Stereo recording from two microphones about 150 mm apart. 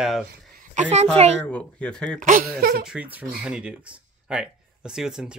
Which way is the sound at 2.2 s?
65° right (ahead or behind).